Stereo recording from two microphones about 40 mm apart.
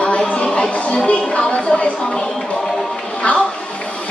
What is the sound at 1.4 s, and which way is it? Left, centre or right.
Speech, left.